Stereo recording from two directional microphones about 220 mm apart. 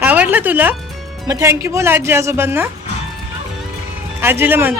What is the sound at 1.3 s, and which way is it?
Speech, 15° right (ahead or behind).